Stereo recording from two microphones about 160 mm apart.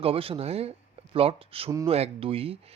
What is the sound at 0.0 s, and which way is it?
Speech, 35° right (ahead or behind).